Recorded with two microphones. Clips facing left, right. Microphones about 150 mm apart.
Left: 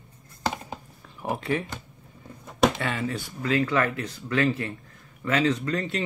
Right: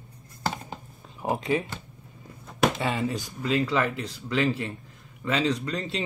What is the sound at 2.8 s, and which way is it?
Speech, 20° right (ahead or behind).